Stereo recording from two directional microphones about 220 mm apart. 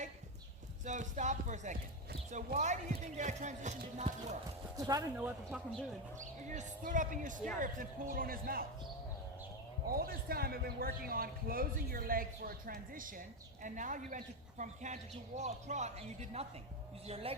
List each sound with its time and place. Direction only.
0.9 s speech: 35° right (ahead or behind)
4.8 s speech: 15° right (ahead or behind)
6.1 s speech: 35° right (ahead or behind)
9.9 s a woman's voice: 40° right (ahead or behind); by 17.3 s 25° right (ahead or behind)